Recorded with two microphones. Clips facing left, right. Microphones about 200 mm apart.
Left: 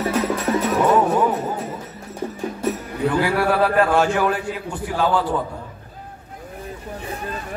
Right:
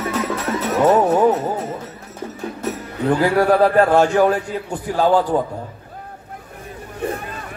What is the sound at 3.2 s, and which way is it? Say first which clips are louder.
A man's voice: right 6 dB; 40° right (ahead or behind).